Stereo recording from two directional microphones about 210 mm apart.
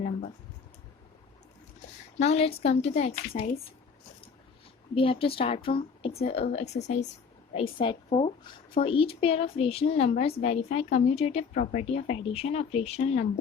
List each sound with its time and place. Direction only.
2.1 s a woman's voice: 30° left (ahead or behind)
4.9 s a woman's voice: 25° left (ahead or behind)